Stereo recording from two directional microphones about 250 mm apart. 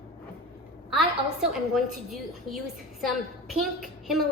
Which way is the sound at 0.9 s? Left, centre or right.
Centre.